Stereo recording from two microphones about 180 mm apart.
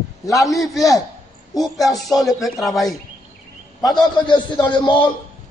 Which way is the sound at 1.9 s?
Centre (ahead or behind).